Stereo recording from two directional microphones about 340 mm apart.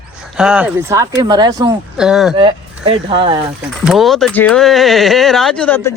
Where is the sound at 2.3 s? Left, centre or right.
Centre.